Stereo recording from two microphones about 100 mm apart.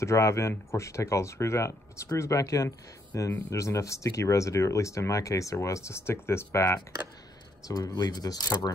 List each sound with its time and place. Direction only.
0.0 s speech: 30° left (ahead or behind)
7.6 s speech: 40° left (ahead or behind)